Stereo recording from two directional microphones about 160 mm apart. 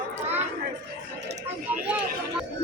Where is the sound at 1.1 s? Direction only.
90° right.